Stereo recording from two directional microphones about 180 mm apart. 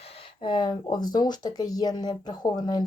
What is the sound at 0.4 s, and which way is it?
Speech, 25° left (ahead or behind).